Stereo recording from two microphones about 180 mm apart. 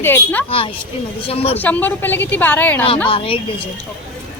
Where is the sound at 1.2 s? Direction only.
35° left (ahead or behind).